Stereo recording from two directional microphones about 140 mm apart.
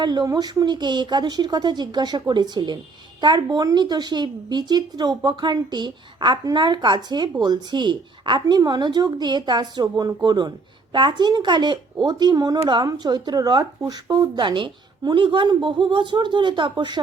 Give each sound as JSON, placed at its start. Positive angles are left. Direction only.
{"t": 0.0, "sound": "a woman's voice", "side_deg": -30}